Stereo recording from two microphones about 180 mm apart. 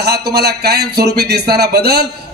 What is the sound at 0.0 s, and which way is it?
Speech, 65° right (ahead or behind).